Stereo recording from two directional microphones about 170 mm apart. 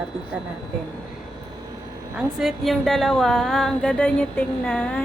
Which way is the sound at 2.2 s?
Centre (ahead or behind).